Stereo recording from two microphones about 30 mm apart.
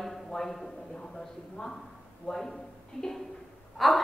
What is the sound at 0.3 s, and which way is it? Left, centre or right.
Speech, centre.